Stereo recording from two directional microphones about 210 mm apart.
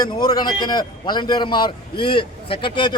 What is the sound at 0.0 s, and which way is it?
A man's voice, 20° left (ahead or behind).